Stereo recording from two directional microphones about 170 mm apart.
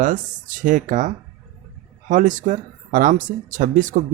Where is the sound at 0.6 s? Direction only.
50° right (ahead or behind).